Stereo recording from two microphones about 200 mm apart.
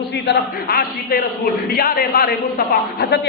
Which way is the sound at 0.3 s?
50° left (ahead or behind).